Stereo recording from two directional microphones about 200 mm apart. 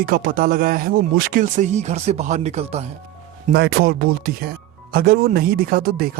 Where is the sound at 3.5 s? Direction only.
50° right (ahead or behind).